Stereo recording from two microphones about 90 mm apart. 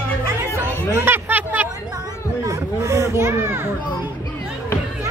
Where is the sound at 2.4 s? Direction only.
35° right (ahead or behind).